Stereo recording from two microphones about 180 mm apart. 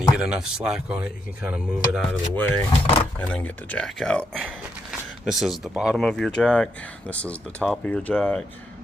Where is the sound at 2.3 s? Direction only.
10° left (ahead or behind).